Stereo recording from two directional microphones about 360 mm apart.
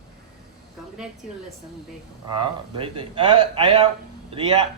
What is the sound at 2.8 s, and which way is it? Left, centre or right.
A man's voice, centre.